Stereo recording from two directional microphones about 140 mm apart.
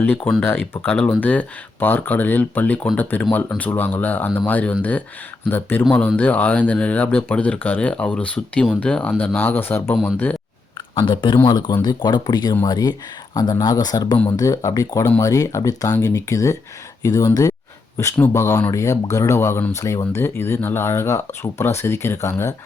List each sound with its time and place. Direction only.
0.4 s speech: 15° left (ahead or behind)
10.9 s speech: 35° left (ahead or behind); by 22.5 s 20° left (ahead or behind)